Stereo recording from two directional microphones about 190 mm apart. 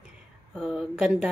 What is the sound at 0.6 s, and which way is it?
Speech, centre (ahead or behind).